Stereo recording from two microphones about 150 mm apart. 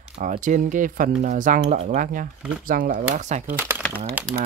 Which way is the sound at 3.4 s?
15° right (ahead or behind).